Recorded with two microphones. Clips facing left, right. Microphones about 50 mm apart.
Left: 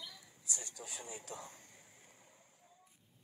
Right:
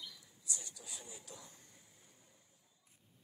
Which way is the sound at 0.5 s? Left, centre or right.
Left.